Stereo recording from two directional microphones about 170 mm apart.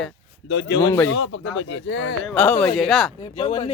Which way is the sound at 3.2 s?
35° left (ahead or behind).